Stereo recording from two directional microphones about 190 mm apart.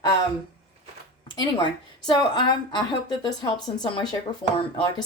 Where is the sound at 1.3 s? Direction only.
25° left (ahead or behind).